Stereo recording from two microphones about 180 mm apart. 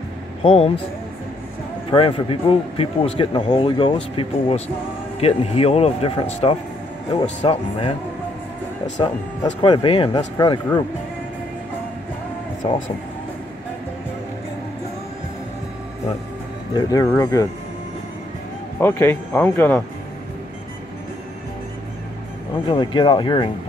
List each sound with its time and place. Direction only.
0.4 s speech: 30° left (ahead or behind)
1.9 s speech: 30° left (ahead or behind)
9.0 s speech: 25° left (ahead or behind)
12.6 s speech: 30° left (ahead or behind)
16.7 s speech: 20° left (ahead or behind)
18.8 s speech: 10° left (ahead or behind)
22.7 s speech: 25° left (ahead or behind)